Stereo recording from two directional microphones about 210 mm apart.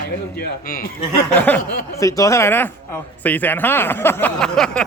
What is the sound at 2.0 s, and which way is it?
Speech, 15° left (ahead or behind).